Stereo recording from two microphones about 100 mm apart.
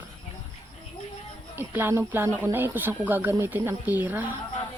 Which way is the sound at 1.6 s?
20° right (ahead or behind).